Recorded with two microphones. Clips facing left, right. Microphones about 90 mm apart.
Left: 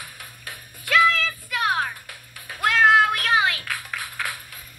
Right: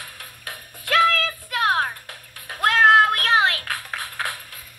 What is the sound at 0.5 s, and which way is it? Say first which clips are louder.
Music: even; 55° right (ahead or behind).